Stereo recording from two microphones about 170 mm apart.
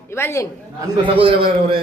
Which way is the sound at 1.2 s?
30° right (ahead or behind).